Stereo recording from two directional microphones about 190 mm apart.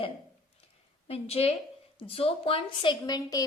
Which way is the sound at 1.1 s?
30° left (ahead or behind).